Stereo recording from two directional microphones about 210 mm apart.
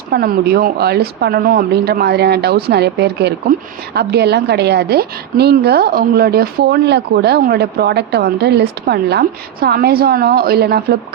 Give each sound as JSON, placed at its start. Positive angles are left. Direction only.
{"t": 0.1, "sound": "a woman's voice", "side_deg": -45}